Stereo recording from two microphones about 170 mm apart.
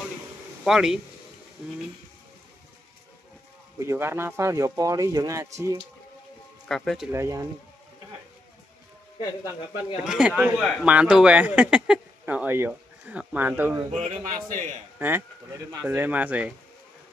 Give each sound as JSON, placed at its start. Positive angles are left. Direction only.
{"t": 0.7, "sound": "speech", "side_deg": -5}
{"t": 3.8, "sound": "speech", "side_deg": -15}
{"t": 6.7, "sound": "speech", "side_deg": 5}
{"t": 7.1, "sound": "speech", "side_deg": -15}
{"t": 9.2, "sound": "speech", "side_deg": 25}
{"t": 10.0, "sound": "speech", "side_deg": -5}
{"t": 13.8, "sound": "a man's voice", "side_deg": -45}
{"t": 15.0, "sound": "speech", "side_deg": -10}